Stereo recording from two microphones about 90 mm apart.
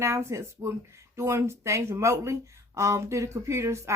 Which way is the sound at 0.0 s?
30° right (ahead or behind).